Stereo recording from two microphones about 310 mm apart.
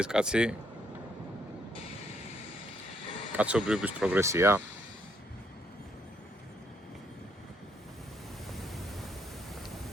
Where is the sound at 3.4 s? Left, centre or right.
Centre.